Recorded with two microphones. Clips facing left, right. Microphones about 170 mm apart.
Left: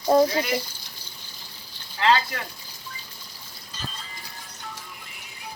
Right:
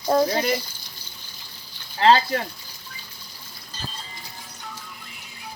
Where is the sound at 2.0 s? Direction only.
35° right (ahead or behind).